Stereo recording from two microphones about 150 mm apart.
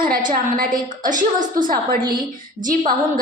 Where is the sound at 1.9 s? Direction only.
30° right (ahead or behind).